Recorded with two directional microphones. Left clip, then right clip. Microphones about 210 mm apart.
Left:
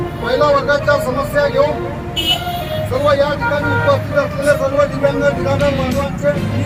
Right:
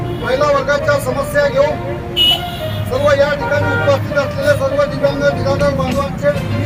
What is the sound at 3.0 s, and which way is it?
Speech, 10° right (ahead or behind).